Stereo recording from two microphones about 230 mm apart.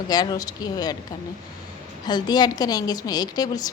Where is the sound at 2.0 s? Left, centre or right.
Centre.